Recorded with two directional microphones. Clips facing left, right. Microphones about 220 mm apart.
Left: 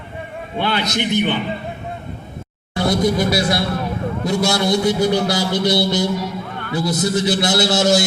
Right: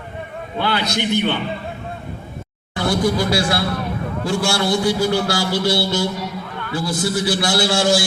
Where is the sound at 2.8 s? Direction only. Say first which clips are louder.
Left 1 dB; 20° left (ahead or behind).